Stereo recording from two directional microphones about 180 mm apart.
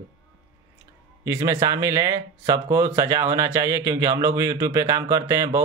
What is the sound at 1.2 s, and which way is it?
Speech, 15° right (ahead or behind).